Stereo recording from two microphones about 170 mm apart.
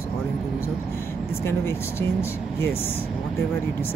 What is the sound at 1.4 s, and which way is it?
Speech, 15° left (ahead or behind).